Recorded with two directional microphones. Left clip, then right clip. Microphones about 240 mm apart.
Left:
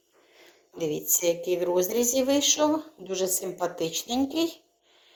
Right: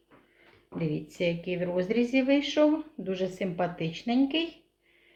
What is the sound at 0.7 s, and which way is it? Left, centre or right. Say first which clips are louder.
A woman's voice: left 4 dB; left.